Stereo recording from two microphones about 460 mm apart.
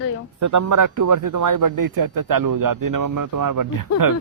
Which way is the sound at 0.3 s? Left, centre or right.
Right.